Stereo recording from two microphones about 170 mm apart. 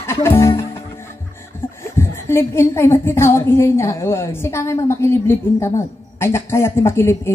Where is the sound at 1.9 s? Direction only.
15° left (ahead or behind).